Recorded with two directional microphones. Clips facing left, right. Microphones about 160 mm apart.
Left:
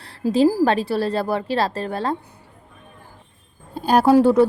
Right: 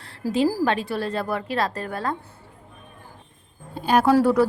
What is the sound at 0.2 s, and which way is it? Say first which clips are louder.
Speech: left 4 dB; 20° left (ahead or behind).